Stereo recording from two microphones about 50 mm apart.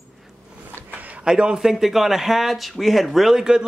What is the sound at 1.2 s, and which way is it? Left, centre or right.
Speech, centre.